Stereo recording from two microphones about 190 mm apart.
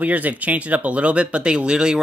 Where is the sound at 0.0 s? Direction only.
10° right (ahead or behind).